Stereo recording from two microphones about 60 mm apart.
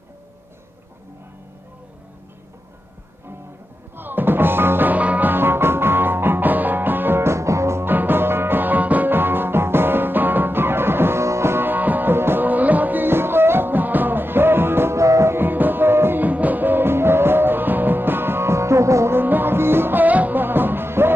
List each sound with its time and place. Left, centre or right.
3.9 s music: right
7.8 s music: right
15.0 s music: right
15.3 s music: right
16.2 s music: right
19.1 s music: right